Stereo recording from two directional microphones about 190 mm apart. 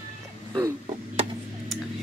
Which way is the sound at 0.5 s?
20° right (ahead or behind).